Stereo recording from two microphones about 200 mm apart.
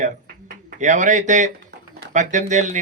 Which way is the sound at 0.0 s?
40° right (ahead or behind).